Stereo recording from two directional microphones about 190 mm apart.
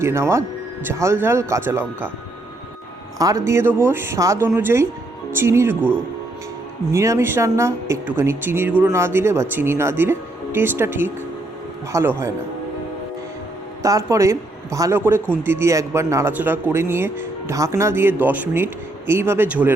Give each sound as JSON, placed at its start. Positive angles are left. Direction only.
{"t": 0.0, "sound": "a man's voice", "side_deg": -15}
{"t": 3.2, "sound": "a man's voice", "side_deg": -15}
{"t": 6.9, "sound": "a man's voice", "side_deg": -15}
{"t": 13.8, "sound": "a man's voice", "side_deg": -15}